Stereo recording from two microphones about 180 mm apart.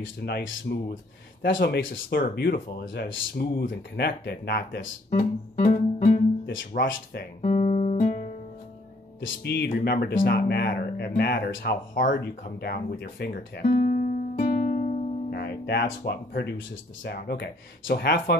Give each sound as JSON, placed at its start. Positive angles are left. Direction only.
{"t": 0.0, "sound": "speech", "side_deg": 65}
{"t": 7.4, "sound": "guitar", "side_deg": 40}
{"t": 8.1, "sound": "music", "side_deg": 50}
{"t": 9.2, "sound": "speech", "side_deg": 65}